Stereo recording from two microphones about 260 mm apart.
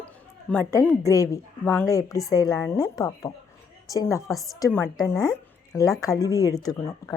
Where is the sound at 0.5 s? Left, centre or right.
Centre.